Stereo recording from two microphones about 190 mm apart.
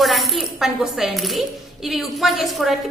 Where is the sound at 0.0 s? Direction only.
Centre (ahead or behind).